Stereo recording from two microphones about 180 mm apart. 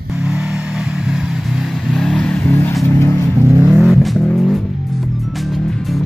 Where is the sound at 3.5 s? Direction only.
10° right (ahead or behind).